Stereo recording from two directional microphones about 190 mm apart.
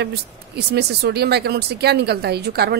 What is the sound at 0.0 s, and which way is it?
A woman's voice, 60° right (ahead or behind).